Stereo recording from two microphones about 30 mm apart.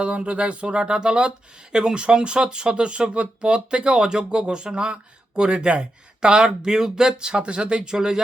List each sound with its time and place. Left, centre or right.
0.0 s speech: right
7.9 s speech: right